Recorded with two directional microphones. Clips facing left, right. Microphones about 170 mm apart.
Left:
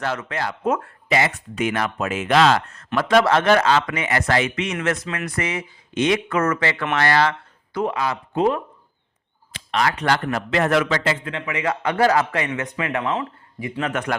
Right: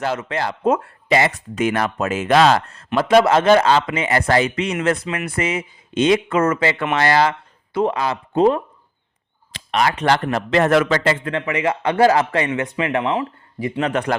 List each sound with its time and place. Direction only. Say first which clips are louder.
0.0 s a man's voice: right 3 dB; 25° right (ahead or behind)
7.9 s speech: right 3 dB; 35° right (ahead or behind)
9.7 s a man's voice: right 3 dB; 25° right (ahead or behind); by 11.4 s 50° right (ahead or behind)
11.4 s a man's voice: right 2 dB; 30° right (ahead or behind)